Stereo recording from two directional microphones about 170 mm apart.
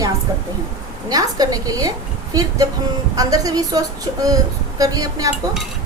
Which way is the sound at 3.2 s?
20° right (ahead or behind).